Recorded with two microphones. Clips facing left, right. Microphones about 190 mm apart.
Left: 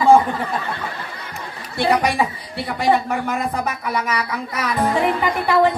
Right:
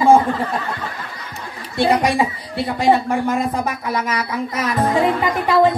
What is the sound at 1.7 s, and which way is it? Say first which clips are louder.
Speech: right 2 dB; 25° right (ahead or behind).